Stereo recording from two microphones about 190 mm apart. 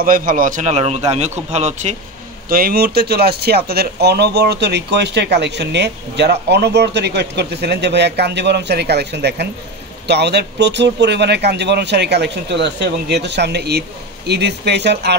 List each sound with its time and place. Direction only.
0.0 s a man's voice: 45° right (ahead or behind)
2.5 s speech: 55° right (ahead or behind)